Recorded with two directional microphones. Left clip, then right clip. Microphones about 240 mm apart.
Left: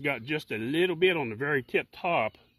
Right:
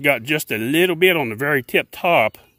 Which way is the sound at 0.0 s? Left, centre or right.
Right.